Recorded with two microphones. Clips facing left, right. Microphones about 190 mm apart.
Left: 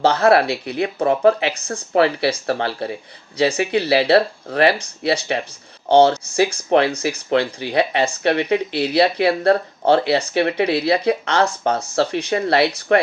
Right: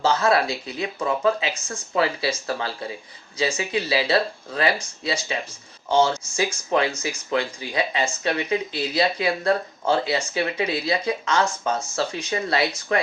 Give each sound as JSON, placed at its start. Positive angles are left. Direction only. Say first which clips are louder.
{"t": 0.0, "sound": "speech", "louder": "left 6 dB", "side_deg": 65}
{"t": 6.8, "sound": "speech", "louder": "left 6 dB", "side_deg": 30}
{"t": 7.1, "sound": "speech", "louder": "left 6 dB", "side_deg": 65}